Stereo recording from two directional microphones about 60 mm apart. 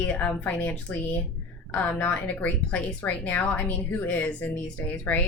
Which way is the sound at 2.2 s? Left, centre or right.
Left.